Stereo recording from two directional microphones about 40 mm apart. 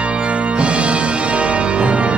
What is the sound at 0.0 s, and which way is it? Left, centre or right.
Music, right.